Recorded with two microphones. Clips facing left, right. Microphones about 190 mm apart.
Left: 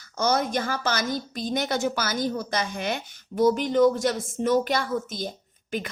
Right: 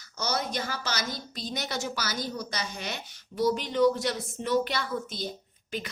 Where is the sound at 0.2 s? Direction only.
50° left (ahead or behind).